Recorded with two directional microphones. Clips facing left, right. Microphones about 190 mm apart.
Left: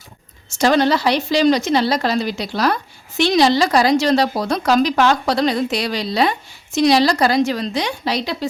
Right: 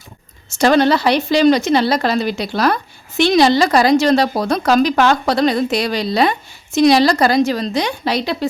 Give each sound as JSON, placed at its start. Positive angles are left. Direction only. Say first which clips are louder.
{"t": 0.6, "sound": "speech", "louder": "right 2 dB", "side_deg": -60}